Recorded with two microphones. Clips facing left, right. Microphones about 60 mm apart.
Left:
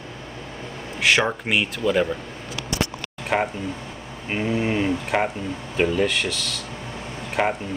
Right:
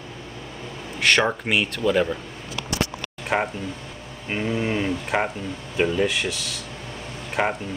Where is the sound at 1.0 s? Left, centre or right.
Centre.